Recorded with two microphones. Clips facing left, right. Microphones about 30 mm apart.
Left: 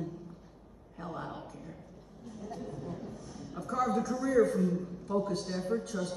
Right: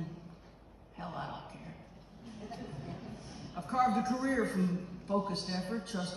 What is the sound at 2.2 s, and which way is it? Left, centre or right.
A woman's voice, right.